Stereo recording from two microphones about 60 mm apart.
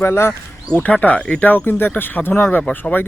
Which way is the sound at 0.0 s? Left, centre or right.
Left.